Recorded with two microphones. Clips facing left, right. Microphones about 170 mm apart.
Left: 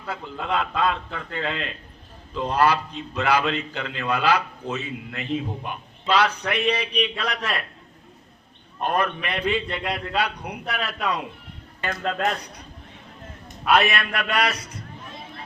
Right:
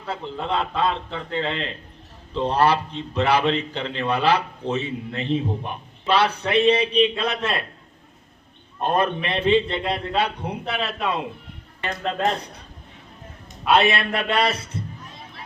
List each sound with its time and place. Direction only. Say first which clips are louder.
0.1 s a man's voice: right 1 dB; 30° right (ahead or behind)
8.8 s a man's voice: right 2 dB; 25° right (ahead or behind)
13.7 s a man's voice: right 2 dB; 25° right (ahead or behind)